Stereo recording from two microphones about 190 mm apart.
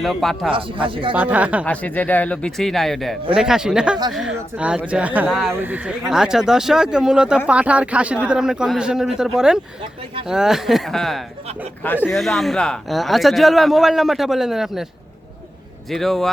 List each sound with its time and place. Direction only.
0.0 s speech: centre (ahead or behind)
0.5 s speech: 25° right (ahead or behind)
1.1 s speech: 10° right (ahead or behind)
1.6 s speech: 10° left (ahead or behind)
15.9 s speech: centre (ahead or behind)